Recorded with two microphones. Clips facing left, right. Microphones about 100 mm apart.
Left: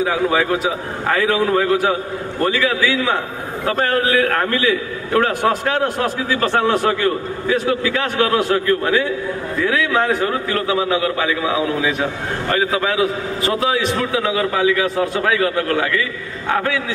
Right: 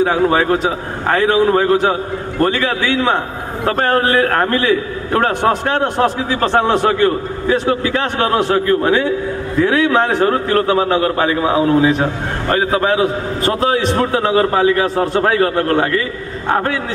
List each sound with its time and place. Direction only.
0.0 s a man's voice: 35° right (ahead or behind)
1.0 s a man's voice: 30° right (ahead or behind)